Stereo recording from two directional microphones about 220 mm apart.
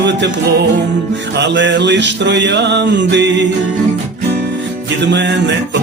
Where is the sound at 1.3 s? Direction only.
55° right (ahead or behind).